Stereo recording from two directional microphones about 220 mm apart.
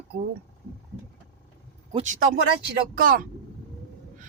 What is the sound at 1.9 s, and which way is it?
Speech, 35° right (ahead or behind).